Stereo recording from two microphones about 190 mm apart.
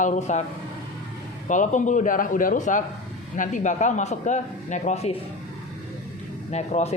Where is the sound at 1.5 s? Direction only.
40° left (ahead or behind).